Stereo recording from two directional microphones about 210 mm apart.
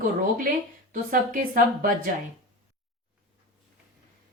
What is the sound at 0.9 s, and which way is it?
A woman's voice, 40° right (ahead or behind).